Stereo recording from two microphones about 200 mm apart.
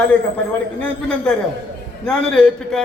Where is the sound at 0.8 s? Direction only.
5° left (ahead or behind).